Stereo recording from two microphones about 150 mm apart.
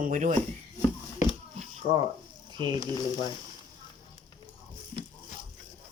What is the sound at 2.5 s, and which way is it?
Speech, 30° right (ahead or behind).